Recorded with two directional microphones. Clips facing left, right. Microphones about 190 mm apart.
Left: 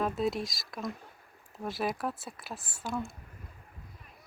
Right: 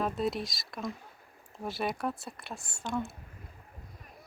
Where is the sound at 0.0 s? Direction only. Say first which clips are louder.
Left 1 dB; centre (ahead or behind).